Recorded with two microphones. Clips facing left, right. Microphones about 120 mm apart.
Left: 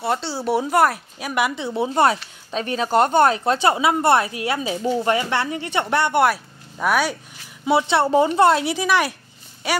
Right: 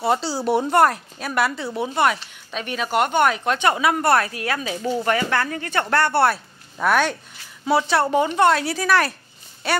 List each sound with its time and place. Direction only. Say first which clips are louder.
0.0 s speech: right 2 dB; centre (ahead or behind); by 1.7 s 15° left (ahead or behind)
1.8 s a woman's voice: left 3 dB; 30° left (ahead or behind); by 7.2 s 10° left (ahead or behind)
7.6 s a woman's voice: left 1 dB; 25° left (ahead or behind)